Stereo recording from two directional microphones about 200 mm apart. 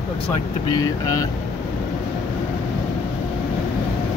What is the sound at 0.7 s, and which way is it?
Speech, 20° left (ahead or behind).